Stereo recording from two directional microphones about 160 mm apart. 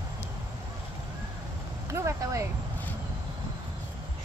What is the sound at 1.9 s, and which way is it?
Speech, 20° right (ahead or behind).